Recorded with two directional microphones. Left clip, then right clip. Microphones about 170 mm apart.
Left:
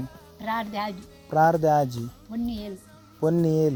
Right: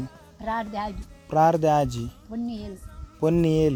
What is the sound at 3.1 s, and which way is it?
Speech, 55° right (ahead or behind).